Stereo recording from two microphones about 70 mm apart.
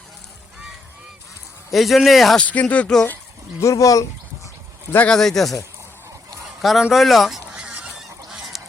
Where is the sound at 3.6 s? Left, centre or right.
Left.